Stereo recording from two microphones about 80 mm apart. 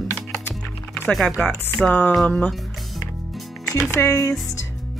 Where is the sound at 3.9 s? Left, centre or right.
Left.